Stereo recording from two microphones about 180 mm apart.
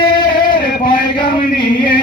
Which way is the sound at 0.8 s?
50° left (ahead or behind).